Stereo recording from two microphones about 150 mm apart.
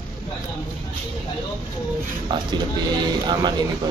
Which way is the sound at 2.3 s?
30° right (ahead or behind).